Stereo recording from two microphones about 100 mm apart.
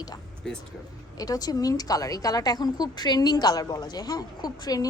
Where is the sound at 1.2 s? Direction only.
40° left (ahead or behind).